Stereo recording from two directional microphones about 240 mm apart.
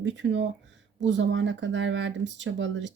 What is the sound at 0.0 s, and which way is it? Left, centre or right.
Speech, right.